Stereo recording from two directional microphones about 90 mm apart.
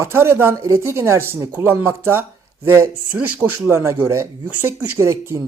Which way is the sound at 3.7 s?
30° right (ahead or behind).